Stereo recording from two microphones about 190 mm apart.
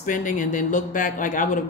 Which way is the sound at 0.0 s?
45° left (ahead or behind).